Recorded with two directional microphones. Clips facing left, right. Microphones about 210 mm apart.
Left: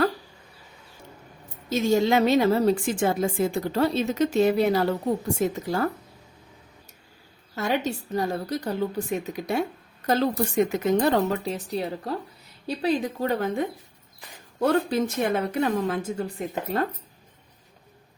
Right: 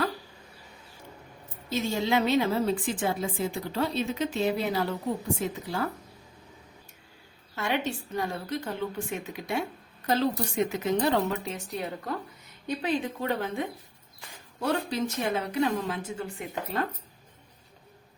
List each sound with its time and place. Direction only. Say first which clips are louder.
1.7 s a woman's voice: left 6 dB; 45° left (ahead or behind)
7.5 s a woman's voice: left 4 dB; 40° left (ahead or behind)
14.6 s a woman's voice: left 6 dB; 50° left (ahead or behind)